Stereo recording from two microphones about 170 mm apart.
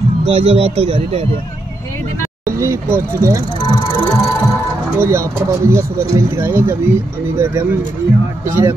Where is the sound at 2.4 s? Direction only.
15° right (ahead or behind).